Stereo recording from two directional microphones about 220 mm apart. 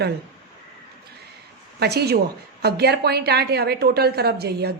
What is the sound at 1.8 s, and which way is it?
A woman's voice, 45° right (ahead or behind).